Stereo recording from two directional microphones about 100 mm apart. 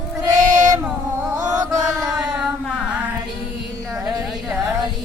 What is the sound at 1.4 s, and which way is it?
Chant, 40° right (ahead or behind).